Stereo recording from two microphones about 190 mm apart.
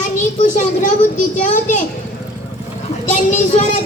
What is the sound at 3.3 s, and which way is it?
Speech, 40° left (ahead or behind).